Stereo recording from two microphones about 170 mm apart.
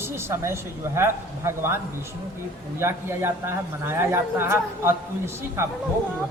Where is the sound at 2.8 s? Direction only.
15° right (ahead or behind).